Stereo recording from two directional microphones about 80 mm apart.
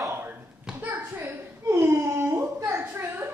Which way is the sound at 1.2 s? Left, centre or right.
Right.